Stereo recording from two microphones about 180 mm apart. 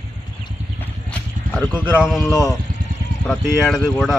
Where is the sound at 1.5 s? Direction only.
Centre (ahead or behind).